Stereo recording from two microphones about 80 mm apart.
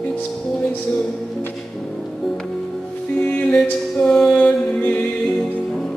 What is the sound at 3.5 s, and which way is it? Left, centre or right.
Music, centre.